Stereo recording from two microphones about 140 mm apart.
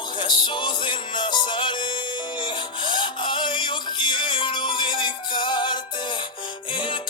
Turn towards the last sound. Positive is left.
turn(degrees=35)  # may be behind; listen again after turning